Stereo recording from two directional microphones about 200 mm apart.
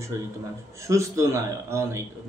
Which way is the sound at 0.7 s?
15° right (ahead or behind).